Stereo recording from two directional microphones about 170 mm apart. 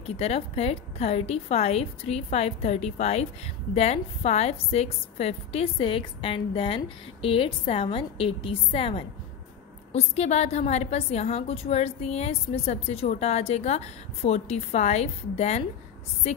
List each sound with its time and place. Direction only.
0.0 s a woman's voice: 35° left (ahead or behind)